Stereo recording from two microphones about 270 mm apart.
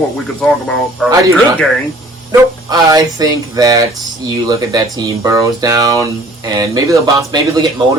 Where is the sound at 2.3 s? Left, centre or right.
Centre.